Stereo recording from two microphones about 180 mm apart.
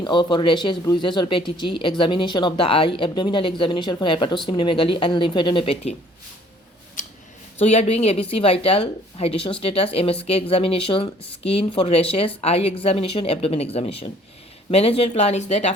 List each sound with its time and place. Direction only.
0.0 s speech: 25° left (ahead or behind)
7.0 s a sound: 45° left (ahead or behind)
7.6 s speech: 35° left (ahead or behind)